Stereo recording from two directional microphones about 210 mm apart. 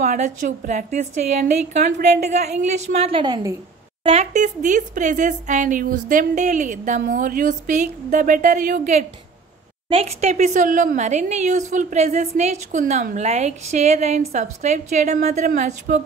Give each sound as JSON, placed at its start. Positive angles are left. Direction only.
{"t": 0.0, "sound": "a woman's voice", "side_deg": -35}
{"t": 4.0, "sound": "a woman's voice", "side_deg": -30}